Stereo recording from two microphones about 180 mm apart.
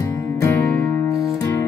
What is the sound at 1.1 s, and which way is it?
Music, 15° left (ahead or behind).